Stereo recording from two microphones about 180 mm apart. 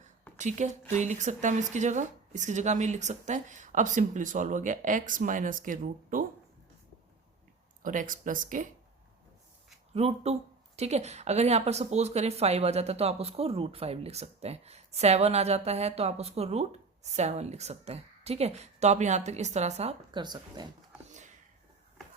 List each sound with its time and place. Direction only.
0.3 s a woman's voice: 40° right (ahead or behind)
7.8 s speech: 50° right (ahead or behind)
9.9 s speech: 35° right (ahead or behind)
21.1 s a sound: 40° right (ahead or behind)